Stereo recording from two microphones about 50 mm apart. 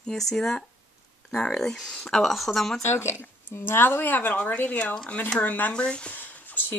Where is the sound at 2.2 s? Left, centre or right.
Centre.